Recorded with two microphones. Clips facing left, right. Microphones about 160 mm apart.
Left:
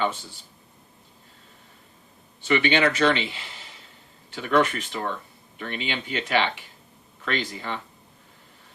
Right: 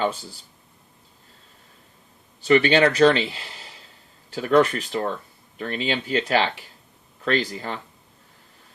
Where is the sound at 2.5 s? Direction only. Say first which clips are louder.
Right 5 dB; 40° right (ahead or behind).